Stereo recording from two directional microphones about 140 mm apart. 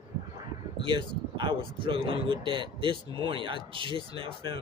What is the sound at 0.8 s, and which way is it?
Speech, 35° right (ahead or behind).